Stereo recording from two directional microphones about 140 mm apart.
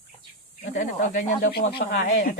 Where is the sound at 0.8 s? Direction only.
70° left (ahead or behind).